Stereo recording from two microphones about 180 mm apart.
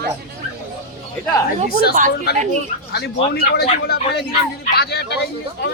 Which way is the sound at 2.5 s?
65° left (ahead or behind).